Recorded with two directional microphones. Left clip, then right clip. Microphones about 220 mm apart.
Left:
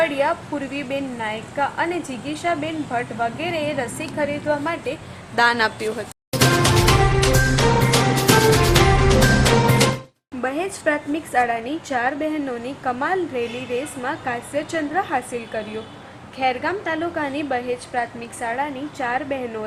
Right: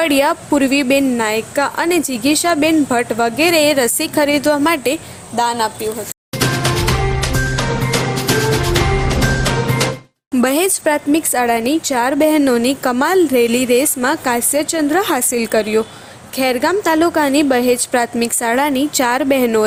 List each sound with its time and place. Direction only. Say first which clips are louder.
0.0 s a woman's voice: right 5 dB; 55° right (ahead or behind)
5.4 s a woman's voice: right 1 dB; 10° right (ahead or behind)
6.4 s music: even; centre (ahead or behind)
8.7 s music: even; centre (ahead or behind)
10.4 s a woman's voice: right 7 dB; 55° right (ahead or behind)